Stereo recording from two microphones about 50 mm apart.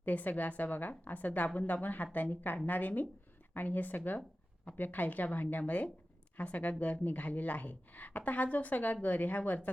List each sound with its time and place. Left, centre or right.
0.0 s speech: left